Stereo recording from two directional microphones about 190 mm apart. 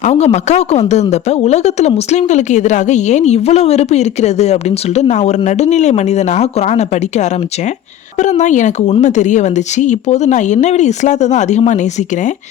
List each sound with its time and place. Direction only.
0.0 s a woman's voice: 35° left (ahead or behind)